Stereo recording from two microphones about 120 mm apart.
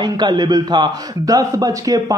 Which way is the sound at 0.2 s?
35° right (ahead or behind).